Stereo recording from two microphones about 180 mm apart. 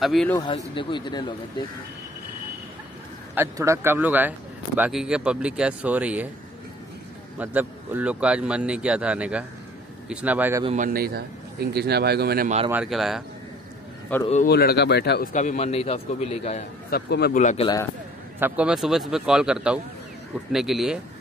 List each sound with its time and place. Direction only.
0.0 s a man's voice: centre (ahead or behind)
0.7 s speech: 25° left (ahead or behind)
3.3 s speech: 15° right (ahead or behind)
7.3 s speech: 10° right (ahead or behind)
10.8 s a man's voice: 55° right (ahead or behind)
12.8 s a man's voice: centre (ahead or behind)
14.4 s speech: 60° left (ahead or behind)
15.3 s a man's voice: 40° left (ahead or behind)
16.9 s speech: 60° left (ahead or behind)
17.6 s speech: 25° left (ahead or behind)
18.4 s a man's voice: 5° right (ahead or behind)